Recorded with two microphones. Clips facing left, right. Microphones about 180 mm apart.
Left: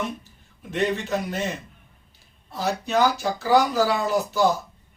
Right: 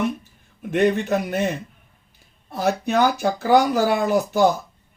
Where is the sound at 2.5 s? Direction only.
55° right (ahead or behind).